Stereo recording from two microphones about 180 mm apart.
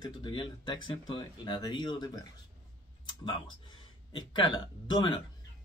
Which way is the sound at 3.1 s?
25° left (ahead or behind).